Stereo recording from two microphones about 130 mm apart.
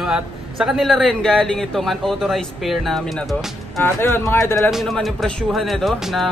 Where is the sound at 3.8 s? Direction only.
20° left (ahead or behind).